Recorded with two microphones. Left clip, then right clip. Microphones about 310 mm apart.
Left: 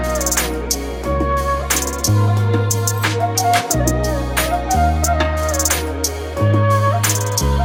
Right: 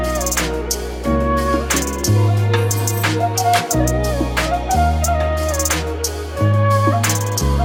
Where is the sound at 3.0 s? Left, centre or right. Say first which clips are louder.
Even; centre.